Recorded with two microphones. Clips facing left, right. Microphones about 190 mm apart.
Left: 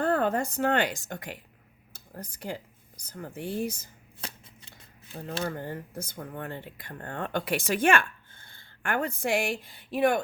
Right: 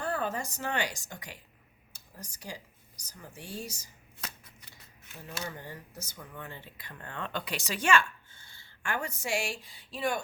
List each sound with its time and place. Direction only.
0.0 s speech: 60° left (ahead or behind)
4.2 s shuffling cards: 30° left (ahead or behind)
5.2 s speech: 50° left (ahead or behind)